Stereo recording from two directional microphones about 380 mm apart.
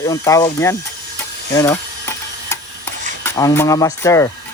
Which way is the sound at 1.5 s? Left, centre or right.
Centre.